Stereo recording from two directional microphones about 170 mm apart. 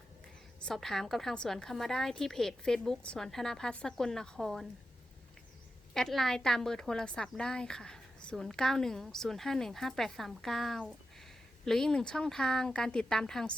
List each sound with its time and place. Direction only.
0.6 s a woman's voice: centre (ahead or behind)
5.9 s a woman's voice: centre (ahead or behind)